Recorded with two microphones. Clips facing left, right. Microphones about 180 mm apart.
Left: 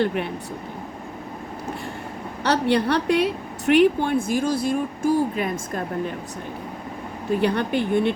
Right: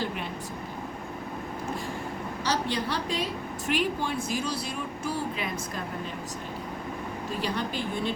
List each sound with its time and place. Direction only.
2.4 s a woman's voice: 65° left (ahead or behind)
7.3 s a woman's voice: 60° left (ahead or behind)